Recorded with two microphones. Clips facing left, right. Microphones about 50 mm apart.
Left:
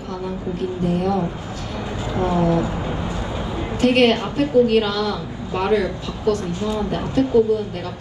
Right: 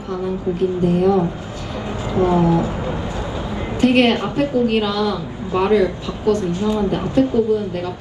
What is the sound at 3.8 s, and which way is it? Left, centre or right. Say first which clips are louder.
A woman's voice: right 1 dB; right.